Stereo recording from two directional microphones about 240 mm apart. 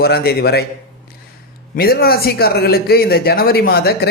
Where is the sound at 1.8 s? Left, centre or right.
Left.